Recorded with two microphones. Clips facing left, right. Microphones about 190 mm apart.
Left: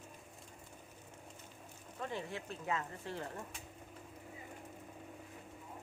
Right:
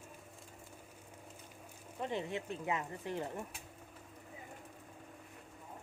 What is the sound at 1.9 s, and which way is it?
Speech, 20° right (ahead or behind).